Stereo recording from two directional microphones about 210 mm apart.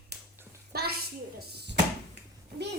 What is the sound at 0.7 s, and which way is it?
A child's voice, 50° right (ahead or behind).